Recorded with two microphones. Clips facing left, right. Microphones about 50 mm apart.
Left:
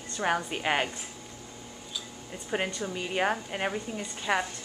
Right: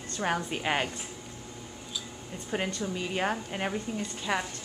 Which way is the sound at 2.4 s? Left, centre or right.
Centre.